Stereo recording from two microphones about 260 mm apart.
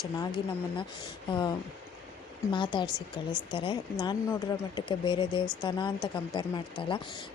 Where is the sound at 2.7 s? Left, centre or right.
Centre.